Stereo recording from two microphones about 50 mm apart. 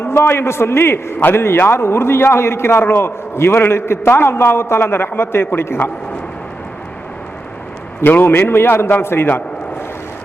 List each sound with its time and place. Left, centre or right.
0.0 s a man's voice: left
8.0 s a man's voice: left